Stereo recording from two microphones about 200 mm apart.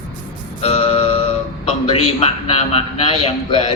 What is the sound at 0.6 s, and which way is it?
Music, 30° left (ahead or behind).